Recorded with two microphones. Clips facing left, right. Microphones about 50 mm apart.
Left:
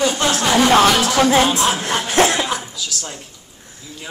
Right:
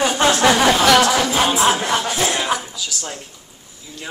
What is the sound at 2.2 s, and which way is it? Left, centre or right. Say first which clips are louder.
Cough: left 5 dB; left.